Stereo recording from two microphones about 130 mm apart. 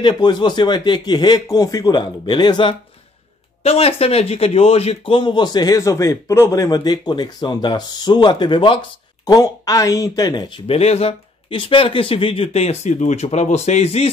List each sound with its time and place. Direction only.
0.2 s speech: 35° left (ahead or behind)
3.6 s speech: 50° left (ahead or behind)
9.2 s speech: 25° left (ahead or behind)
10.7 s speech: 50° left (ahead or behind)